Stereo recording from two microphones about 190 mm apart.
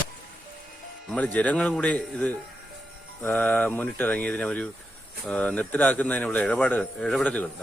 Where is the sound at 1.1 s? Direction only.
5° left (ahead or behind).